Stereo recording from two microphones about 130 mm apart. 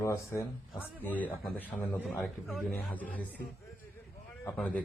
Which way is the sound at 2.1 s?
Centre (ahead or behind).